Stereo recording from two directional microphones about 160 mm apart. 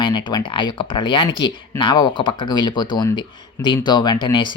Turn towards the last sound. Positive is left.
turn(degrees=30)  # may be behind; listen again after turning